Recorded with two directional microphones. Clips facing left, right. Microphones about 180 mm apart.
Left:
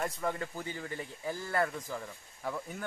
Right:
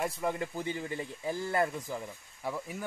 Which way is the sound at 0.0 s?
15° right (ahead or behind).